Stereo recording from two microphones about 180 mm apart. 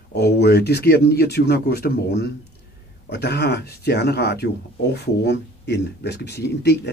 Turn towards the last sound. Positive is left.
turn(degrees=65)  # may be behind; listen again after turning